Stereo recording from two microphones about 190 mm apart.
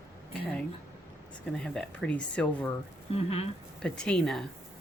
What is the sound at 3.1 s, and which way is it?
Music, 30° left (ahead or behind).